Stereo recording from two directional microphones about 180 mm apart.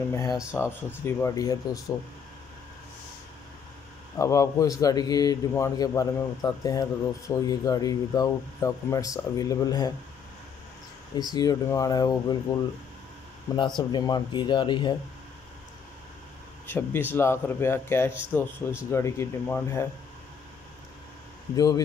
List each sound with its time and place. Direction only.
0.1 s a man's voice: 20° left (ahead or behind)
4.2 s a man's voice: 20° left (ahead or behind)
11.1 s a man's voice: 20° left (ahead or behind)
13.7 s a man's voice: 25° left (ahead or behind)
16.6 s speech: 10° left (ahead or behind)
21.5 s a man's voice: 20° left (ahead or behind)